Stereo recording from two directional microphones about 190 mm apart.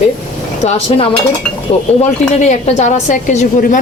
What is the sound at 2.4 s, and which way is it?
A woman's voice, 35° left (ahead or behind).